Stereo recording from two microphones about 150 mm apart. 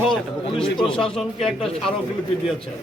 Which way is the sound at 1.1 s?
5° left (ahead or behind).